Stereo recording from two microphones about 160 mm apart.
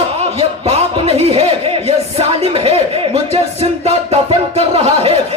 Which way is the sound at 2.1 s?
40° right (ahead or behind).